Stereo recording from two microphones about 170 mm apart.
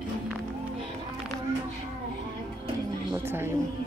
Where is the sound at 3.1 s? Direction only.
15° right (ahead or behind).